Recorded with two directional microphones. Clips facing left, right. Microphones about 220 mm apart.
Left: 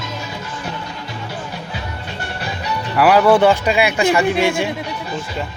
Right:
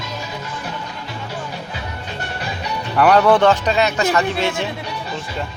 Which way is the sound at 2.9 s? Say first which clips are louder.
Left 1 dB; 5° left (ahead or behind).